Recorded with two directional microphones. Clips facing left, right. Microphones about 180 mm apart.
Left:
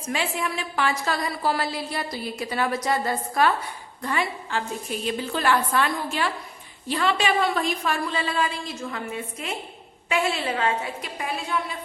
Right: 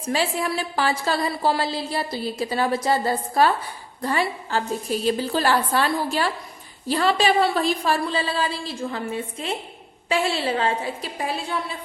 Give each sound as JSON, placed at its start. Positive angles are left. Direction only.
{"t": 0.0, "sound": "a woman's voice", "side_deg": -35}